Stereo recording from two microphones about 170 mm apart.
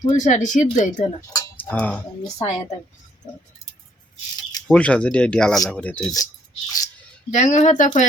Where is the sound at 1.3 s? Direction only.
20° left (ahead or behind).